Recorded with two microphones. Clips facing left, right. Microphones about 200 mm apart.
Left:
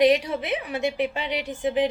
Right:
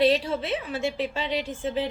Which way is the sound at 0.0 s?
15° left (ahead or behind).